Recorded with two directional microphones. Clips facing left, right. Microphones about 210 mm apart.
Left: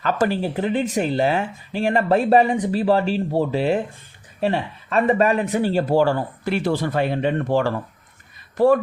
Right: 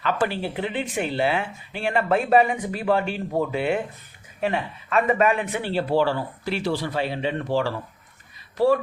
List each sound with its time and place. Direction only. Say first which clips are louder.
0.0 s speech: left 4 dB; 40° left (ahead or behind)